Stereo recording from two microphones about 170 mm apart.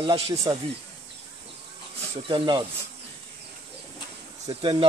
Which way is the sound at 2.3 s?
25° right (ahead or behind).